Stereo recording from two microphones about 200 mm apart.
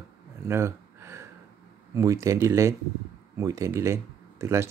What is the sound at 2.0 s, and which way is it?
Speech, 15° right (ahead or behind).